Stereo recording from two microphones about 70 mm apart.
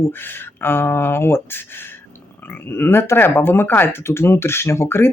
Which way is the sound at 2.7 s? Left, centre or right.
Left.